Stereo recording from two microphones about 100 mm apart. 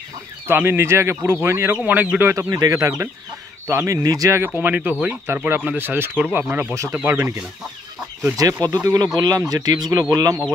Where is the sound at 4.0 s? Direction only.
35° right (ahead or behind).